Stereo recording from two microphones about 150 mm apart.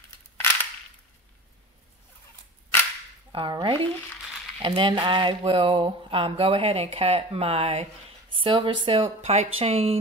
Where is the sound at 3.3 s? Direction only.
35° right (ahead or behind).